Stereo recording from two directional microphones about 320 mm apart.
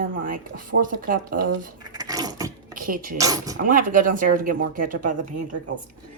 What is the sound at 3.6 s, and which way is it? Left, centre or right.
A woman's voice, right.